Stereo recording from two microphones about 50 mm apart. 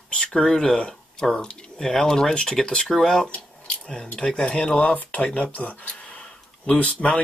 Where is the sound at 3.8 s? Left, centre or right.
Centre.